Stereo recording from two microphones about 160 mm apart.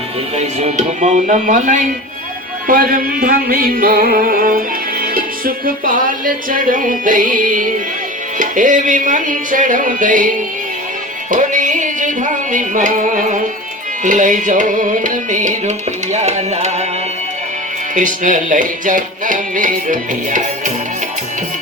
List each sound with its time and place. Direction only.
0.3 s music: 45° right (ahead or behind)
17.9 s music: 55° right (ahead or behind)